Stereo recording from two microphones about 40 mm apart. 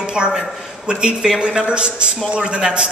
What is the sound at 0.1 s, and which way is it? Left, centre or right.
A man's voice, centre.